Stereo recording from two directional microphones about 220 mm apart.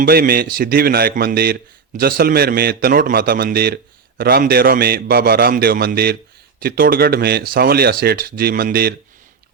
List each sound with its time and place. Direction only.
0.0 s a man's voice: 45° right (ahead or behind)